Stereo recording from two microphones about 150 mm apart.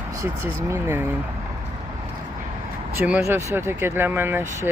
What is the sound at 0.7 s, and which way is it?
Speech, 15° right (ahead or behind).